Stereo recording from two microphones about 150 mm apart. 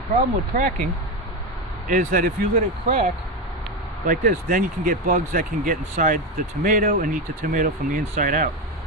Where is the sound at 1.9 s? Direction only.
65° right (ahead or behind).